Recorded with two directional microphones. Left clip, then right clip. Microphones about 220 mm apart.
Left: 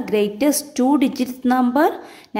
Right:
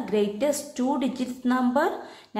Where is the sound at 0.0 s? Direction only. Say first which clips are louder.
Left 6 dB; 40° left (ahead or behind).